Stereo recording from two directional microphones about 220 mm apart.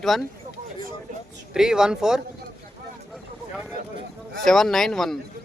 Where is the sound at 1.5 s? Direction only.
5° right (ahead or behind).